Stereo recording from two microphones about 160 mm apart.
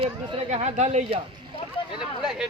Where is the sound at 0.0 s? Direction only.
35° right (ahead or behind).